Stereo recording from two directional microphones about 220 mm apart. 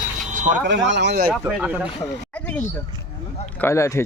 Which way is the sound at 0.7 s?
55° right (ahead or behind).